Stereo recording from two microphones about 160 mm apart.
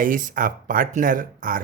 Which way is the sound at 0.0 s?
60° right (ahead or behind).